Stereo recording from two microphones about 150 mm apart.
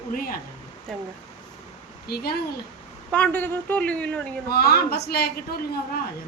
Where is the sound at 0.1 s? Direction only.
75° left (ahead or behind).